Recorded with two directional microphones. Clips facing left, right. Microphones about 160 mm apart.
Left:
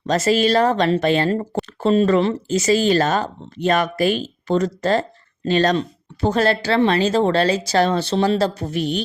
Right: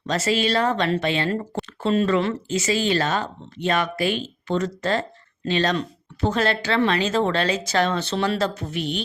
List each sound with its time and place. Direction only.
0.0 s speech: 40° left (ahead or behind)